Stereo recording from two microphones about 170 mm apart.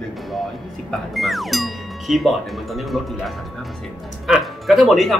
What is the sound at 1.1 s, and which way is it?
Speech, centre (ahead or behind).